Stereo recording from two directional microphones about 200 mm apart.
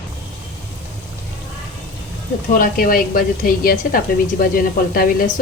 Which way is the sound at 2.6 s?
45° left (ahead or behind).